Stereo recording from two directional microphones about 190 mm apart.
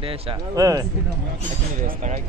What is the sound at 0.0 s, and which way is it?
Speech, 25° right (ahead or behind).